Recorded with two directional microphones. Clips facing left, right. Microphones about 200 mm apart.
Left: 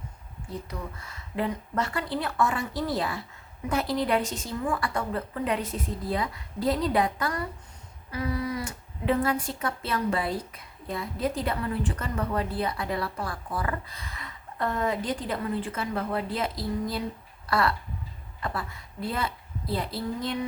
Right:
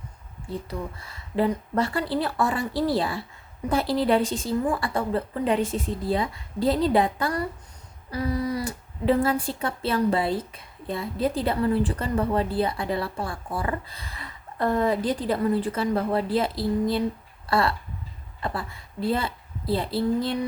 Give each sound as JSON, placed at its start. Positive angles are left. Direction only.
{"t": 0.7, "sound": "a woman's voice", "side_deg": -30}